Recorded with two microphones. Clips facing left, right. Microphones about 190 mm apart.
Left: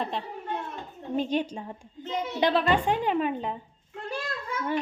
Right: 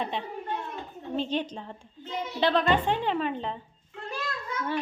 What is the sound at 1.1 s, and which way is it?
Speech, 10° left (ahead or behind).